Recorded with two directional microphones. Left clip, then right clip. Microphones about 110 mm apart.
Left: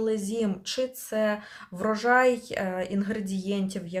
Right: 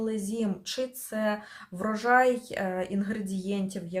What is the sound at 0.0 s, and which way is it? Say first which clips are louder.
Speech: left 4 dB; 25° left (ahead or behind).